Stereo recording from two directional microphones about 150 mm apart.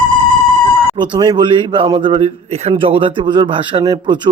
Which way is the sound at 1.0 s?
30° right (ahead or behind).